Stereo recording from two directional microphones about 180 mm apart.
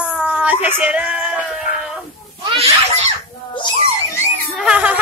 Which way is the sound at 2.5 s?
35° right (ahead or behind).